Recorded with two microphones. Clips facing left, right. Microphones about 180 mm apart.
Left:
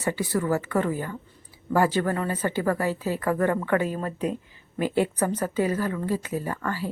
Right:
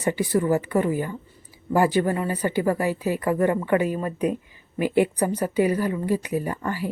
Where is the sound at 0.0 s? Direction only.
20° right (ahead or behind).